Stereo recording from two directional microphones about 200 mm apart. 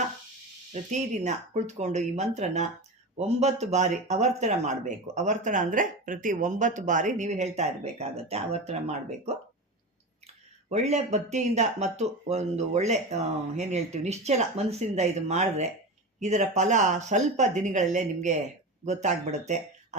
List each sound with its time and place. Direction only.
0.7 s speech: 35° right (ahead or behind)